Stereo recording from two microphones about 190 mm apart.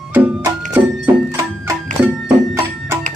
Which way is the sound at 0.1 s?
10° right (ahead or behind).